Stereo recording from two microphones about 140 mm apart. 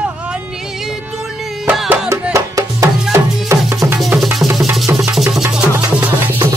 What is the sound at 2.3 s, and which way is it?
Music, 25° right (ahead or behind).